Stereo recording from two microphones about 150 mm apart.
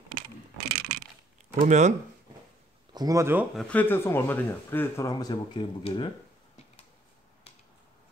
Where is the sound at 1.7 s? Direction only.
50° right (ahead or behind).